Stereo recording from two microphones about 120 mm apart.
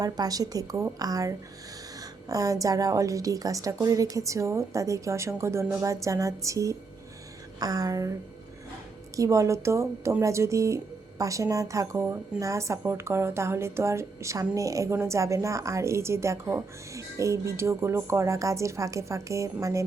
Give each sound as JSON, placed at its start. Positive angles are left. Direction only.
{"t": 0.0, "sound": "a woman's voice", "side_deg": -30}
{"t": 9.1, "sound": "speech", "side_deg": -25}